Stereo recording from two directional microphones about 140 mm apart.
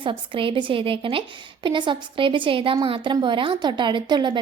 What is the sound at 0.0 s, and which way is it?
A woman's voice, 40° right (ahead or behind).